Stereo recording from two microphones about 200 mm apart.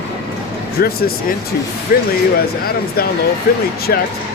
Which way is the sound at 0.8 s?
50° left (ahead or behind).